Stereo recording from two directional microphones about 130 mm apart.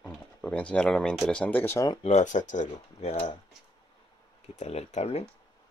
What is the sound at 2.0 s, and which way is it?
Speech, 65° left (ahead or behind).